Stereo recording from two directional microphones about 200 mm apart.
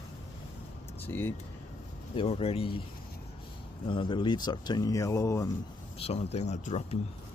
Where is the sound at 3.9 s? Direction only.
25° left (ahead or behind).